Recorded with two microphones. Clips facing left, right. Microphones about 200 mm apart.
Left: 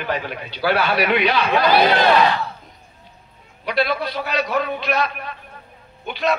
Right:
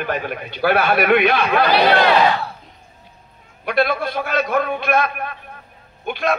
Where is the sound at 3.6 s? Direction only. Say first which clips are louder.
Right 2 dB; 50° right (ahead or behind).